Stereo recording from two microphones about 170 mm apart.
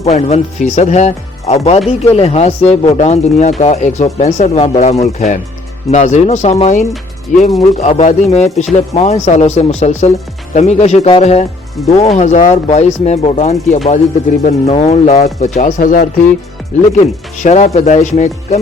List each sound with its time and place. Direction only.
0.0 s speech: 40° left (ahead or behind); by 16.0 s 55° left (ahead or behind)
16.9 s speech: 45° left (ahead or behind)